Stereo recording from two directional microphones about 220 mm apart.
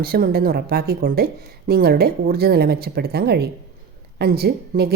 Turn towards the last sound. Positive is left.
turn(degrees=-45)  # may be behind; listen again after turning